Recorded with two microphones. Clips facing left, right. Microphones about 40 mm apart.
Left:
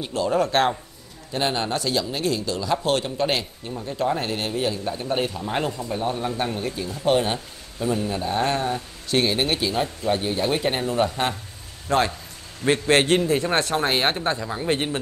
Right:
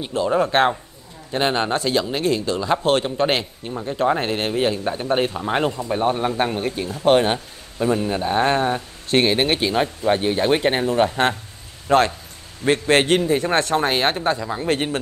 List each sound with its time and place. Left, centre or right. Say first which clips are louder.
0.1 s a man's voice: right 3 dB; right
14.0 s speech: right 3 dB; centre